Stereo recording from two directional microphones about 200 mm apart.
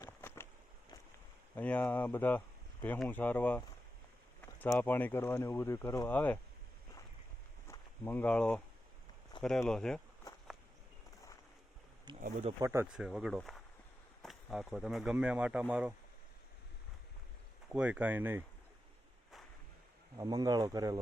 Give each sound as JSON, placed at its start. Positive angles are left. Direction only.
{"t": 0.0, "sound": "a sound", "side_deg": 10}
{"t": 1.5, "sound": "speech", "side_deg": 10}
{"t": 7.7, "sound": "speech", "side_deg": 10}
{"t": 12.2, "sound": "speech", "side_deg": -35}
{"t": 12.5, "sound": "speech", "side_deg": -15}
{"t": 12.9, "sound": "speech", "side_deg": -5}
{"t": 17.7, "sound": "speech", "side_deg": -5}
{"t": 20.1, "sound": "speech", "side_deg": -20}